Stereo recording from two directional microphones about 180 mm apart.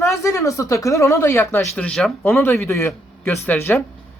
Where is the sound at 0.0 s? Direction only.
15° left (ahead or behind).